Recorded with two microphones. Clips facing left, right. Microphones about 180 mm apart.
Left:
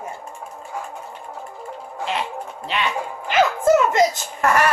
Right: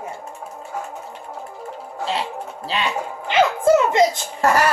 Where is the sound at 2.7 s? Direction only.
30° right (ahead or behind).